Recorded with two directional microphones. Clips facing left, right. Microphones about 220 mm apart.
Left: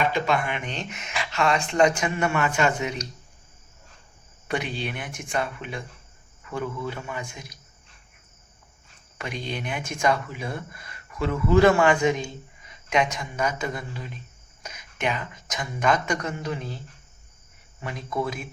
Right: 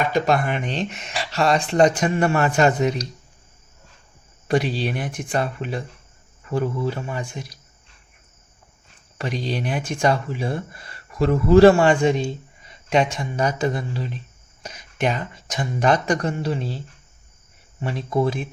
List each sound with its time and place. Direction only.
0.1 s speech: 40° right (ahead or behind)
4.4 s speech: 35° right (ahead or behind)
9.1 s speech: 35° right (ahead or behind)